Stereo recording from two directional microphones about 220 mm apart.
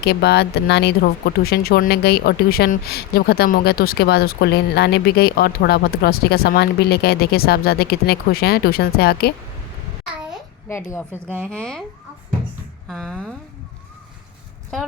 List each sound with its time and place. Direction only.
0.0 s speech: 50° left (ahead or behind)
10.7 s a woman's voice: 10° left (ahead or behind)
12.9 s speech: centre (ahead or behind)